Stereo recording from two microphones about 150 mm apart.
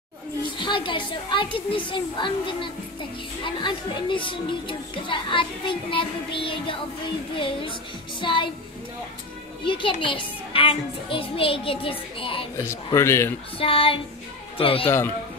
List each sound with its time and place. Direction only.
0.6 s speech: 35° left (ahead or behind)
9.7 s speech: 35° left (ahead or behind)
12.5 s speech: 20° left (ahead or behind)
13.6 s speech: 40° left (ahead or behind)